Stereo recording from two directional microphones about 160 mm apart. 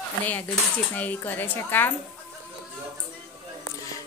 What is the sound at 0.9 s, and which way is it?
Speech, 10° left (ahead or behind).